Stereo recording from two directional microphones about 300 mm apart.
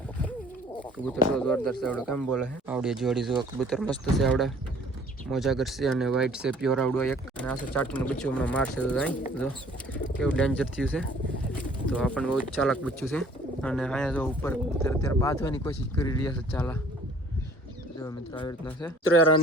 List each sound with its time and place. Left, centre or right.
1.4 s speech: centre
18.0 s speech: centre
19.1 s speech: left